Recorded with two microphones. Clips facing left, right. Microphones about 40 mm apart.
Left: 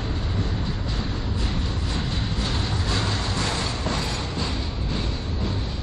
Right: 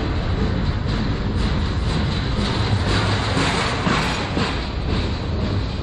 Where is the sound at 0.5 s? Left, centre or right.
Right.